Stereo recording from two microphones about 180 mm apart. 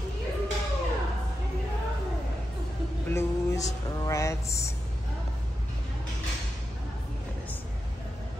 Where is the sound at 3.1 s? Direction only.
15° left (ahead or behind).